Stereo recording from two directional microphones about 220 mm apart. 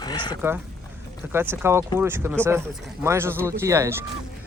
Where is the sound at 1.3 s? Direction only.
10° right (ahead or behind).